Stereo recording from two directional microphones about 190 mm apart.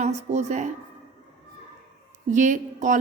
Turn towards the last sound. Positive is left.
turn(degrees=-40)  # may be behind; listen again after turning